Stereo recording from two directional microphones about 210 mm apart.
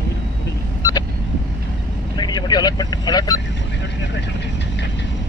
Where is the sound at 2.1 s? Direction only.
20° left (ahead or behind).